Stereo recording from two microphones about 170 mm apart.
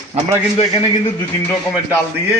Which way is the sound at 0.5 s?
35° left (ahead or behind).